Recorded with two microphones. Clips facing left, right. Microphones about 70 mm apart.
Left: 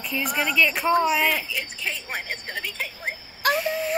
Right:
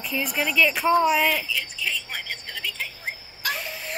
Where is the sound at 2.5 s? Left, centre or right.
Left.